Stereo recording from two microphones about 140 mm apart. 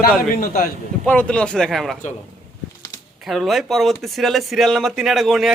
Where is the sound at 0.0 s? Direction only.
90° left.